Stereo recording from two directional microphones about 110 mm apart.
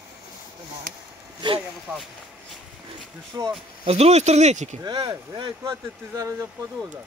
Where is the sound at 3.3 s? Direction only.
35° right (ahead or behind).